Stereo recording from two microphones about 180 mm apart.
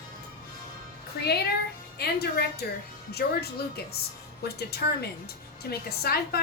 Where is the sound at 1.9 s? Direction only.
60° left (ahead or behind).